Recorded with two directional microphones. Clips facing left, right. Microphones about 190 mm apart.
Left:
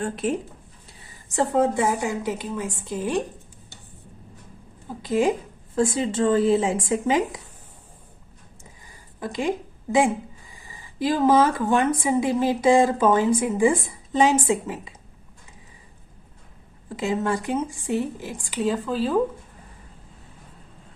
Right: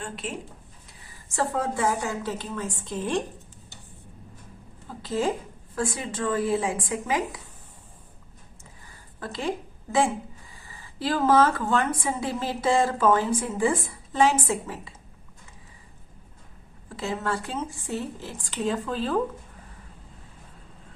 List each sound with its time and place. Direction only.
0.0 s speech: 45° left (ahead or behind)
1.4 s a woman's voice: 20° left (ahead or behind)
4.9 s a woman's voice: 15° left (ahead or behind)
8.9 s a sound: 15° left (ahead or behind)
10.7 s a woman's voice: 15° left (ahead or behind)
16.9 s a woman's voice: 20° left (ahead or behind)